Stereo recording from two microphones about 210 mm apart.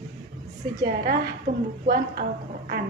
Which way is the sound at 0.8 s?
45° right (ahead or behind).